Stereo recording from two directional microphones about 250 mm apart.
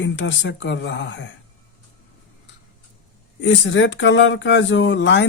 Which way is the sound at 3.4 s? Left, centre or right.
Left.